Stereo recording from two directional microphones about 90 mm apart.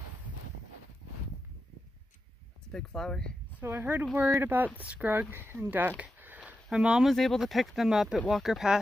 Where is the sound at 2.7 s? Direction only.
5° left (ahead or behind).